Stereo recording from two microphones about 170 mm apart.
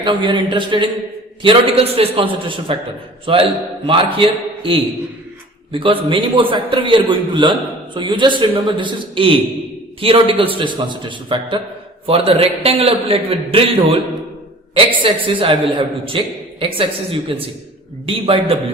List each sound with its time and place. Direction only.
0.0 s a man's voice: 30° right (ahead or behind)
5.8 s a man's voice: 30° right (ahead or behind)